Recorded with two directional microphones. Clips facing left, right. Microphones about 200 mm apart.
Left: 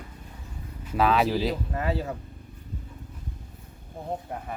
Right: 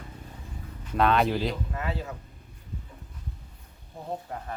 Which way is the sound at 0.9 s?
5° left (ahead or behind).